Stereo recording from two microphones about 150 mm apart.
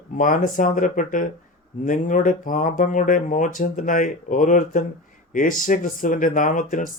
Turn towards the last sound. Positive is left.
turn(degrees=60)  # may be behind; listen again after turning